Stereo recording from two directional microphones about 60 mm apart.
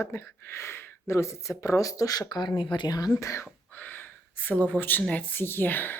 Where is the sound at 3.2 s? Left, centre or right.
Left.